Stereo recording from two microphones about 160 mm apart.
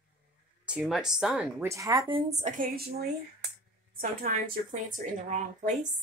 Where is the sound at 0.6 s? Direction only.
5° right (ahead or behind); by 2.0 s 20° right (ahead or behind).